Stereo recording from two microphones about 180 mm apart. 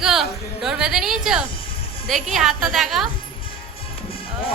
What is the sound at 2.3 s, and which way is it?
Speech, centre (ahead or behind).